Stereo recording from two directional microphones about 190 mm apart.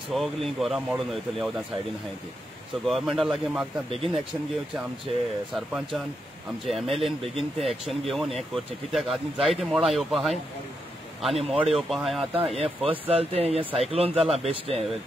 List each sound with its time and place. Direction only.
0.1 s speech: centre (ahead or behind)
2.8 s speech: centre (ahead or behind)
6.7 s speech: centre (ahead or behind)
11.3 s speech: 30° right (ahead or behind)
11.7 s speech: centre (ahead or behind)
12.5 s speech: 30° right (ahead or behind)